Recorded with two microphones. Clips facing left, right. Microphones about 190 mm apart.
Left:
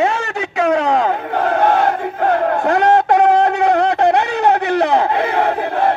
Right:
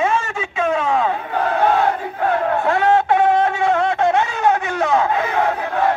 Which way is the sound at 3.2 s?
70° left (ahead or behind).